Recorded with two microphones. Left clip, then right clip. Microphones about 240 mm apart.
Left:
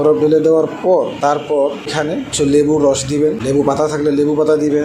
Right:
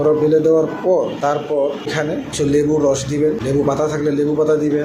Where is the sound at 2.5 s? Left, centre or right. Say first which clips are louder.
Left 3 dB; left.